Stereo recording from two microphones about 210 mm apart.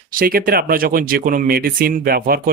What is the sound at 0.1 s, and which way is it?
Speech, 45° right (ahead or behind).